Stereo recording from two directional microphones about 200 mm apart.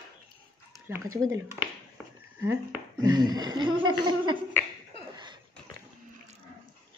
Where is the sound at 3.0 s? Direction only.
20° right (ahead or behind).